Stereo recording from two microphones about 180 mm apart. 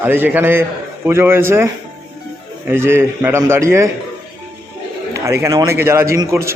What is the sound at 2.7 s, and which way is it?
A man's voice, 15° right (ahead or behind).